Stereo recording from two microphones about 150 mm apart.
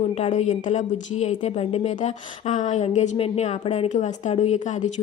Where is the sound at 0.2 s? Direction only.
50° left (ahead or behind).